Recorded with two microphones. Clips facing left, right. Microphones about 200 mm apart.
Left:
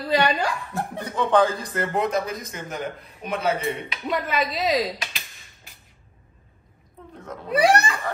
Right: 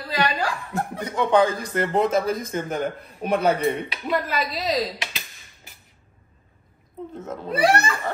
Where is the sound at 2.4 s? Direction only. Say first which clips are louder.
Right 6 dB; 50° right (ahead or behind).